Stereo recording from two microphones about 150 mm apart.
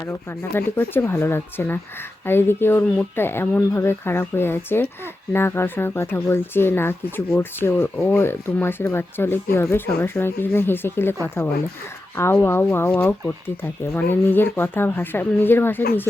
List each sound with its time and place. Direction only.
0.1 s speech: 15° left (ahead or behind)
12.1 s speech: 15° left (ahead or behind)